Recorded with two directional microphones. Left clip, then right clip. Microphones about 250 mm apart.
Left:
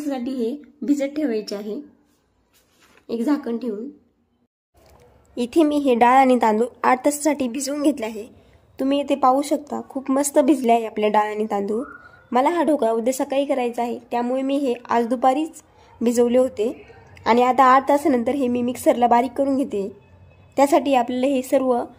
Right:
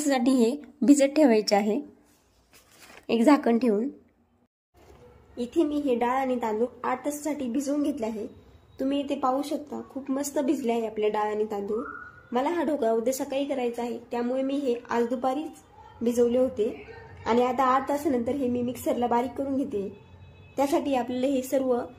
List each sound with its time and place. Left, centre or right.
0.0 s a woman's voice: right
3.1 s a woman's voice: centre
5.3 s a woman's voice: left